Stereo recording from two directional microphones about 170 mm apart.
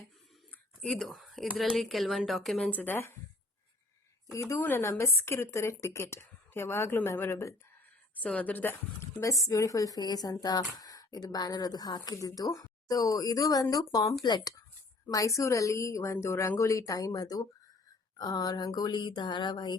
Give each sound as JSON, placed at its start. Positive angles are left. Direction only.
{"t": 0.9, "sound": "speech", "side_deg": 0}
{"t": 4.3, "sound": "a woman's voice", "side_deg": 20}